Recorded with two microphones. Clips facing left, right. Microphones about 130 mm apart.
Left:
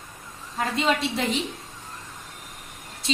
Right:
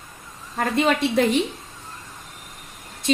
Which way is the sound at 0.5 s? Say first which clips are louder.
Right 4 dB; 50° right (ahead or behind).